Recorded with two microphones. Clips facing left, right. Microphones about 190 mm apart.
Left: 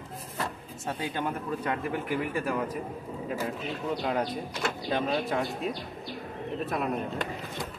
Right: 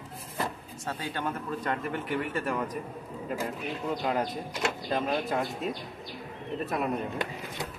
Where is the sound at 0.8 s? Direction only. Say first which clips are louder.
Left 2 dB; 15° left (ahead or behind).